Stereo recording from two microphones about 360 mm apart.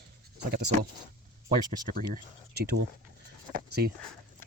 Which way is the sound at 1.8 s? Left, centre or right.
Right.